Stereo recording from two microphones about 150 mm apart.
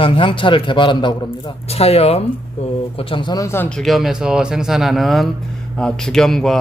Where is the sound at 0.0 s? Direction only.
35° left (ahead or behind); by 3.7 s 20° left (ahead or behind).